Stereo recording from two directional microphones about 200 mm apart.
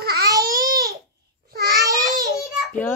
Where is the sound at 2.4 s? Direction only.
5° left (ahead or behind).